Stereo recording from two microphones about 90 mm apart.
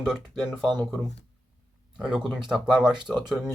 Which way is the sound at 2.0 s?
10° right (ahead or behind).